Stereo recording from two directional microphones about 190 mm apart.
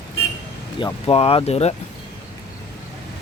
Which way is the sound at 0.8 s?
30° left (ahead or behind).